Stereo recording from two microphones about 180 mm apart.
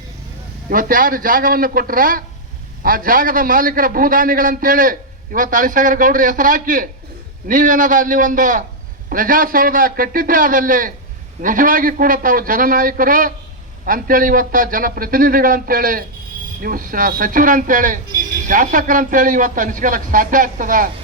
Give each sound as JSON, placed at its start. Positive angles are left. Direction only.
{"t": 0.7, "sound": "speech", "side_deg": -50}